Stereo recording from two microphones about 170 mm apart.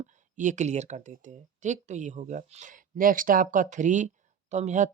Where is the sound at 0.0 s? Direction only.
45° right (ahead or behind).